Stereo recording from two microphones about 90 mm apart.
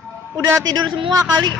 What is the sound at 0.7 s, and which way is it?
Speech, 55° right (ahead or behind).